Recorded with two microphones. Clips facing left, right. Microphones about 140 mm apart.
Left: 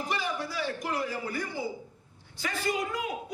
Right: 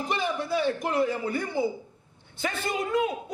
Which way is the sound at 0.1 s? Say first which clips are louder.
Right 8 dB; 25° right (ahead or behind).